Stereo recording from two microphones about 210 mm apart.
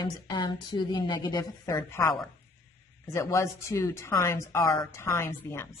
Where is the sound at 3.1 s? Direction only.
15° left (ahead or behind).